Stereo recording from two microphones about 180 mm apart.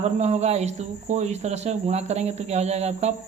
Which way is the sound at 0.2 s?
40° right (ahead or behind).